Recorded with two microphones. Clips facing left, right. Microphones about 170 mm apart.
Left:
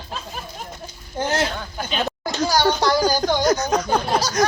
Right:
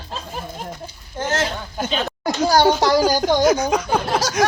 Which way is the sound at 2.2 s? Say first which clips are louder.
Right 5 dB; 55° right (ahead or behind).